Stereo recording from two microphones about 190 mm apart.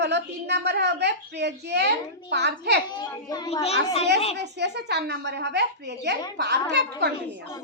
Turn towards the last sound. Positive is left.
turn(degrees=-60)  # may be behind; listen again after turning